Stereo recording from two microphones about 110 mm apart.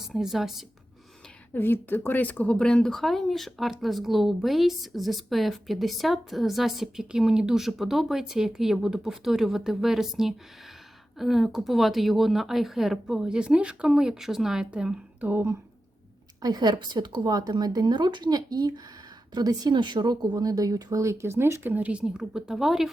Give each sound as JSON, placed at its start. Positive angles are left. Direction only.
{"t": 0.1, "sound": "speech", "side_deg": -5}
{"t": 1.5, "sound": "speech", "side_deg": 20}
{"t": 16.4, "sound": "speech", "side_deg": -40}